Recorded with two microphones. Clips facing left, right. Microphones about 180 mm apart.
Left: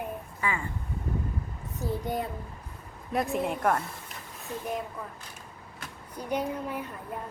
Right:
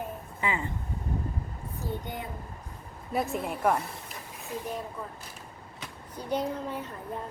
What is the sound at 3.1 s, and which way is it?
Speech, centre (ahead or behind).